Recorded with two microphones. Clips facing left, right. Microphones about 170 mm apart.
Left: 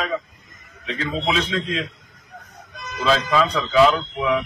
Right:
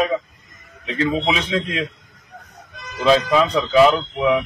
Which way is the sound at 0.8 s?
20° right (ahead or behind).